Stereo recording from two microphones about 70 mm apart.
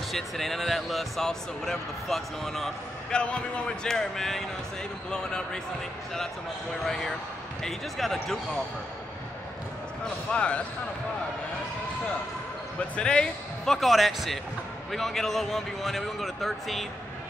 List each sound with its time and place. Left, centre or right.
0.1 s speech: centre
6.8 s speech: centre
10.3 s speech: centre
12.9 s speech: centre